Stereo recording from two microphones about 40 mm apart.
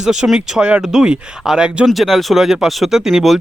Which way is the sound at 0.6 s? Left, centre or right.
Right.